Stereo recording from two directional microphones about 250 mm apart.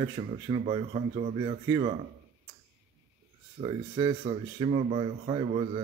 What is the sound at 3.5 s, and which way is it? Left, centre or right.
Speech, centre.